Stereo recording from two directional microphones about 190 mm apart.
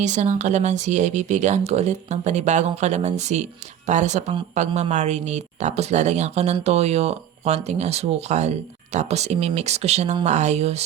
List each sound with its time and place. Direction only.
0.0 s speech: 40° right (ahead or behind)